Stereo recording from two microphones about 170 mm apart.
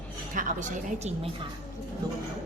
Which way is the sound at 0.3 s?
50° right (ahead or behind).